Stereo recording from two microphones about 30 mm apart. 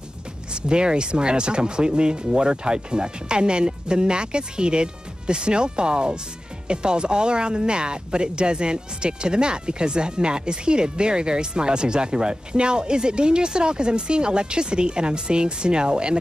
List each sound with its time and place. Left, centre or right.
0.5 s speech: right